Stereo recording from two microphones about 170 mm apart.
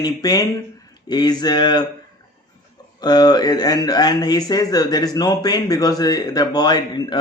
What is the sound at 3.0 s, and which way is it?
Speech, 25° left (ahead or behind).